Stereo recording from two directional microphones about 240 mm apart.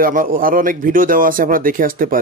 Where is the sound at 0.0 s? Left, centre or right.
Right.